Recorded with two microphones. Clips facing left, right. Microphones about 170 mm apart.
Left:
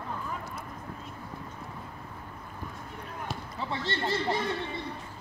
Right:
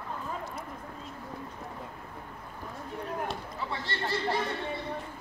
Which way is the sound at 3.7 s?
25° left (ahead or behind).